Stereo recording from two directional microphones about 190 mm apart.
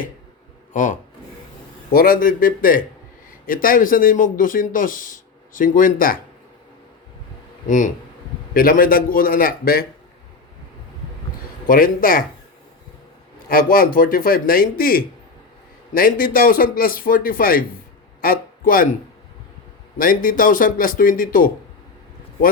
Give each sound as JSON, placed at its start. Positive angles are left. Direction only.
{"t": 0.7, "sound": "speech", "side_deg": 40}
{"t": 7.7, "sound": "speech", "side_deg": 45}
{"t": 11.7, "sound": "speech", "side_deg": 50}
{"t": 13.5, "sound": "speech", "side_deg": 50}
{"t": 18.2, "sound": "a sound", "side_deg": 50}
{"t": 20.0, "sound": "speech", "side_deg": 45}